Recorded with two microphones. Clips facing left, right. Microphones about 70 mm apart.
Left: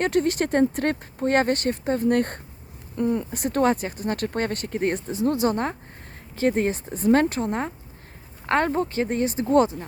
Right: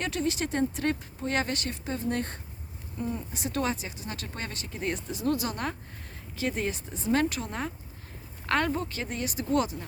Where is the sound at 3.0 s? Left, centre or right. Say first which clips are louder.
Left 9 dB; left.